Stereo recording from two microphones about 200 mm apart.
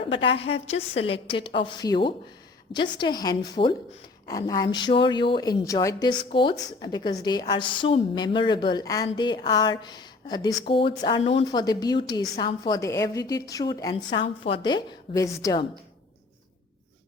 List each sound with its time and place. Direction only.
0.2 s a woman's voice: 25° left (ahead or behind)